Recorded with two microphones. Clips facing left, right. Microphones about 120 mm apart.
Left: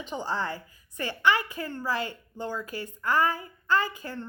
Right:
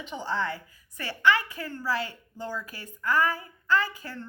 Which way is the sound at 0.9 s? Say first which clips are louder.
Right 1 dB; 20° left (ahead or behind).